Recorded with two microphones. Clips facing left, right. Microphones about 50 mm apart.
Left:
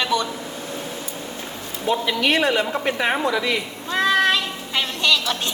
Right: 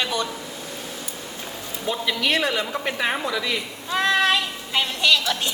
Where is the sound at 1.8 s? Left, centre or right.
Centre.